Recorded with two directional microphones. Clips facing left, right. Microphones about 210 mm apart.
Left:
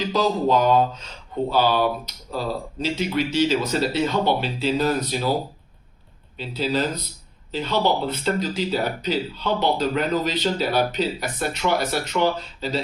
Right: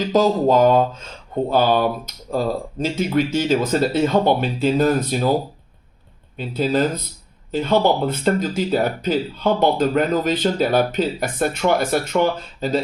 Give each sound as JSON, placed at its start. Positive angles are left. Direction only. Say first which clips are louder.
{"t": 0.1, "sound": "speech", "louder": "right 5 dB", "side_deg": -45}
{"t": 6.3, "sound": "speech", "louder": "right 4 dB", "side_deg": -50}